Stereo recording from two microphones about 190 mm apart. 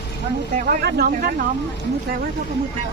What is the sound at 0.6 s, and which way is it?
Speech, 55° right (ahead or behind).